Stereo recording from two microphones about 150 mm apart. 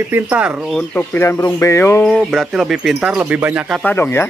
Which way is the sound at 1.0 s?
15° left (ahead or behind).